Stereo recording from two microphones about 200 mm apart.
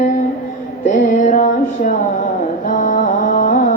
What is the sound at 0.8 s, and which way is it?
Music, 35° left (ahead or behind).